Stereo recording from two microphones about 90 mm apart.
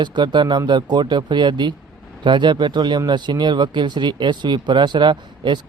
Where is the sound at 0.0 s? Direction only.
60° right (ahead or behind).